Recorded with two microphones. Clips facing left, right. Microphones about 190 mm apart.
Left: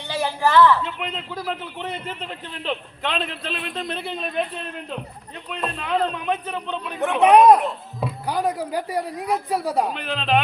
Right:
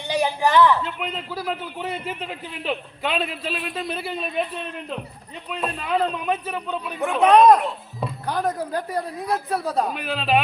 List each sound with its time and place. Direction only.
0.1 s a woman's voice: 15° right (ahead or behind)
0.8 s a man's voice: centre (ahead or behind)
5.5 s a man's voice: 5° right (ahead or behind); by 9.9 s 10° left (ahead or behind)
9.9 s speech: 5° right (ahead or behind)